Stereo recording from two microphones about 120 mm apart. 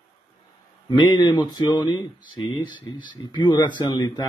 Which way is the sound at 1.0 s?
40° left (ahead or behind).